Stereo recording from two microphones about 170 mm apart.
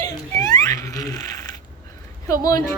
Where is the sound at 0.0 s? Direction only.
20° left (ahead or behind).